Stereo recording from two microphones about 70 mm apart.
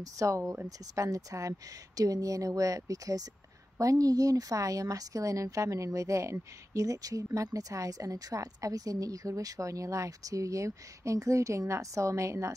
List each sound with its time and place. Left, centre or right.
0.0 s a woman's voice: right